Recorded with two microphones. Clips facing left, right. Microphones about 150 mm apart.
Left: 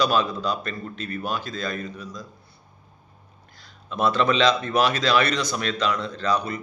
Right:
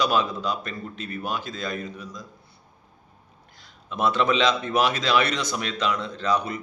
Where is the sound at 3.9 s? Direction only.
20° right (ahead or behind).